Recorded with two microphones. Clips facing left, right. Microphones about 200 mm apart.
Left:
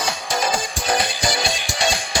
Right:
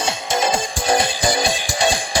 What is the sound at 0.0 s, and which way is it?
Music, 25° right (ahead or behind).